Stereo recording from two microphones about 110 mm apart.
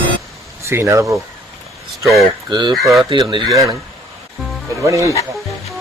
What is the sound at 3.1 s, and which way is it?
Speech, 45° right (ahead or behind).